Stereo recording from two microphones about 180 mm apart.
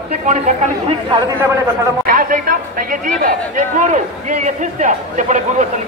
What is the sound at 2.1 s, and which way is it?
Speech, 50° right (ahead or behind).